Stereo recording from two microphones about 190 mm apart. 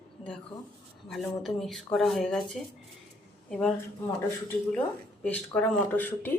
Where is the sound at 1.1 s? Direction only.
Centre (ahead or behind).